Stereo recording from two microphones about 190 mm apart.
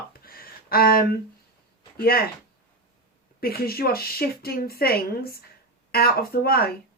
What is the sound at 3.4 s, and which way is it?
A woman's voice, 55° left (ahead or behind).